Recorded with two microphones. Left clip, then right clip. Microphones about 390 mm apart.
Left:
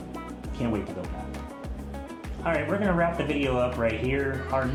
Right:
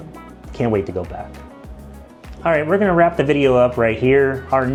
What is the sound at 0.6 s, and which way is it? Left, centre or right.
Speech, right.